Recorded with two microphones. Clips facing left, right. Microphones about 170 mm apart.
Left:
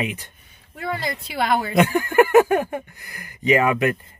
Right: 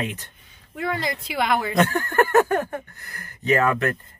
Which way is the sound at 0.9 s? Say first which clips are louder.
Even; 25° left (ahead or behind).